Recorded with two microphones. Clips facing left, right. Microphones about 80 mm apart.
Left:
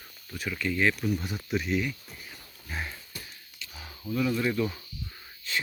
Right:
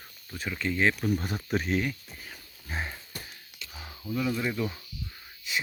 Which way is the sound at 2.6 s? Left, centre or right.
Right.